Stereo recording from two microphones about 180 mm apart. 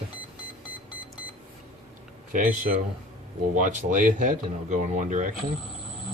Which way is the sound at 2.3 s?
45° right (ahead or behind).